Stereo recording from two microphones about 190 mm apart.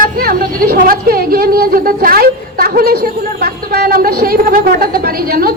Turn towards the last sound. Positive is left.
turn(degrees=-55)  # may be behind; listen again after turning